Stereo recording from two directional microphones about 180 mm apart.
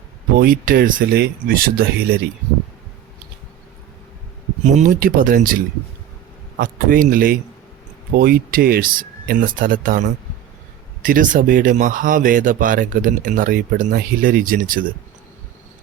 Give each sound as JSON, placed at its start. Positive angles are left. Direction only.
{"t": 0.3, "sound": "speech", "side_deg": -50}
{"t": 4.6, "sound": "speech", "side_deg": -45}
{"t": 11.0, "sound": "speech", "side_deg": -50}